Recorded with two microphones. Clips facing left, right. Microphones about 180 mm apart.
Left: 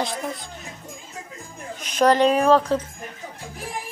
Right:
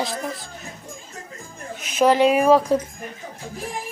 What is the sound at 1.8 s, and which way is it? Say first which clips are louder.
A child's voice: right 1 dB; 5° right (ahead or behind).